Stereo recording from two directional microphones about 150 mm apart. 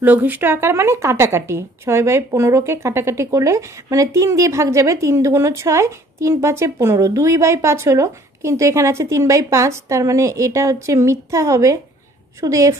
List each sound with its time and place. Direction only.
0.0 s speech: 10° right (ahead or behind)